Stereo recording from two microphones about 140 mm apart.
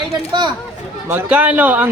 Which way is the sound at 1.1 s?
10° right (ahead or behind).